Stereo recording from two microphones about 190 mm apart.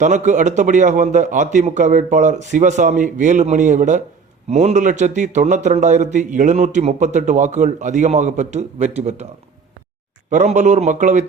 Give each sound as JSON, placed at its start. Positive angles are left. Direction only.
{"t": 0.0, "sound": "a man's voice", "side_deg": -40}
{"t": 10.2, "sound": "a man's voice", "side_deg": -40}